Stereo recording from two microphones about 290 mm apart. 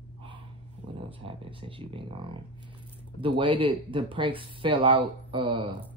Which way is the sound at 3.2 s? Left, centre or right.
Centre.